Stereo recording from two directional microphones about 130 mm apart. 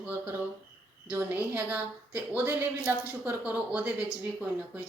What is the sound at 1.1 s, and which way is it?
A woman's voice, 15° right (ahead or behind).